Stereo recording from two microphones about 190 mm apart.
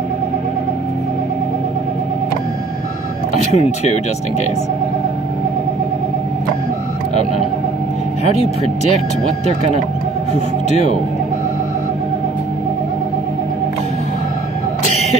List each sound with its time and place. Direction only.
3.5 s speech: 35° left (ahead or behind)
10.3 s speech: 35° left (ahead or behind)